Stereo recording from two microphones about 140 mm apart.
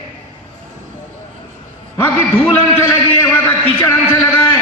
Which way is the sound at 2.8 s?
15° left (ahead or behind).